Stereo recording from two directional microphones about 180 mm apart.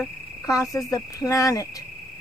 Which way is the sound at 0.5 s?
20° left (ahead or behind).